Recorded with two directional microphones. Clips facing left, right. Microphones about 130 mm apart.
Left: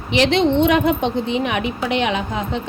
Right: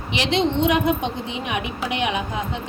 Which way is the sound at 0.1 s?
60° left (ahead or behind).